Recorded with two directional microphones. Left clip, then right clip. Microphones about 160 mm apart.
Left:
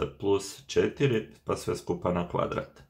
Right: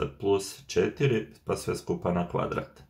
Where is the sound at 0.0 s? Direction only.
25° left (ahead or behind).